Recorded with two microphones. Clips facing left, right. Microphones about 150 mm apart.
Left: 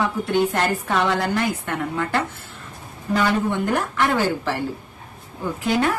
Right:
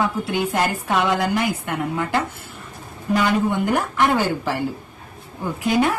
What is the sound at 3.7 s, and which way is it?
Speech, 15° right (ahead or behind).